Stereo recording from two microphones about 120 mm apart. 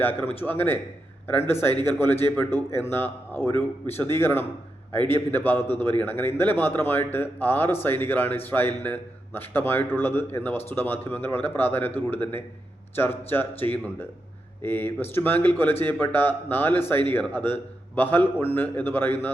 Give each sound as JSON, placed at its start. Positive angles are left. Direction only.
{"t": 0.0, "sound": "a man's voice", "side_deg": 15}